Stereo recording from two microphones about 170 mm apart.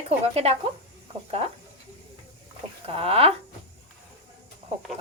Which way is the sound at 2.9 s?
35° right (ahead or behind).